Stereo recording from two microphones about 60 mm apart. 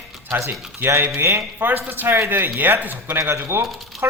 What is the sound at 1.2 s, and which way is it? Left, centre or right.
Speech, right.